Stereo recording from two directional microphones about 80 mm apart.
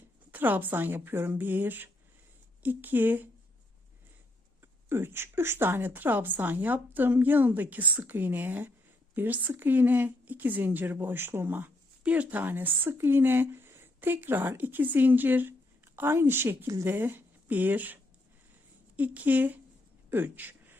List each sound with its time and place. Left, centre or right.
0.3 s speech: right
4.6 s a woman's voice: right